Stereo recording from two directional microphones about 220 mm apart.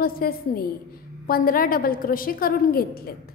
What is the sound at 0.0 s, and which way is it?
A woman's voice, 45° left (ahead or behind).